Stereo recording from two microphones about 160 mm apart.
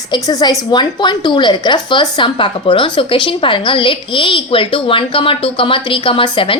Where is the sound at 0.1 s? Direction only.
25° left (ahead or behind).